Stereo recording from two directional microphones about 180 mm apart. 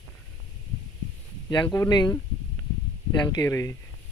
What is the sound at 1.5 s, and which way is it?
Speech, 20° left (ahead or behind).